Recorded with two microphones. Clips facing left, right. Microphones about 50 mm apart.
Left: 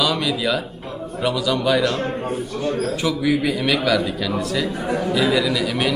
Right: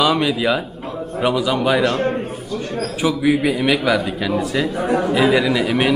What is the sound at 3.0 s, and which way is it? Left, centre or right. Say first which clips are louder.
A man's voice: right 6 dB; centre.